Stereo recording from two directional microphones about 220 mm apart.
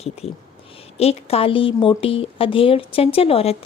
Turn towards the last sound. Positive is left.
turn(degrees=25)  # may be behind; listen again after turning